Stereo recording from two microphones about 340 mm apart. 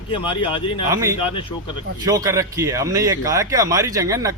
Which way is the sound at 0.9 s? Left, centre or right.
Centre.